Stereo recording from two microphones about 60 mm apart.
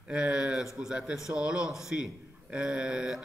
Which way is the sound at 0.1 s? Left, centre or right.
Centre.